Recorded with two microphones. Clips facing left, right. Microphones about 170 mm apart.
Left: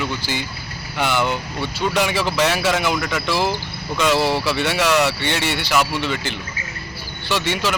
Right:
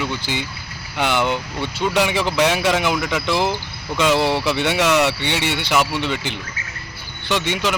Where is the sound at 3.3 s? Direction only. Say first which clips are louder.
Even; 20° right (ahead or behind).